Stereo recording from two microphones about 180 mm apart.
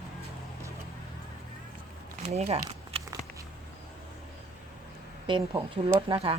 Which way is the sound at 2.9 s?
30° right (ahead or behind).